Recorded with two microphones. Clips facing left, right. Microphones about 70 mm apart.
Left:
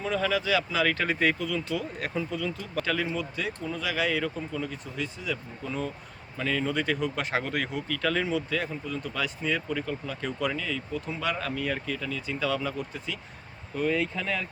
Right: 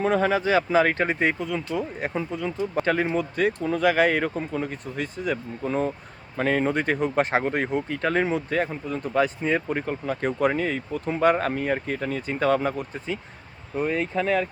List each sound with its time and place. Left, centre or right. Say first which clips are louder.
0.0 s speech: right 6 dB; right
2.8 s speech: right 5 dB; right